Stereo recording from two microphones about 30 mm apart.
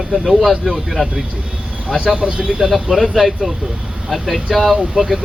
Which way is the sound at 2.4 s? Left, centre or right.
Right.